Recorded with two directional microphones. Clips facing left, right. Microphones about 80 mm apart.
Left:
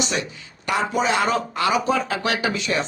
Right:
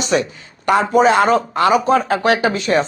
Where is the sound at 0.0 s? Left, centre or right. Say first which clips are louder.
Right 8 dB; right.